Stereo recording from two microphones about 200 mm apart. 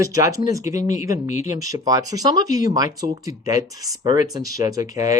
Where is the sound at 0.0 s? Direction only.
15° right (ahead or behind).